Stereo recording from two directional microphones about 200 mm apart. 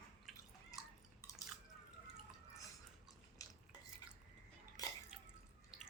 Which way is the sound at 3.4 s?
15° left (ahead or behind).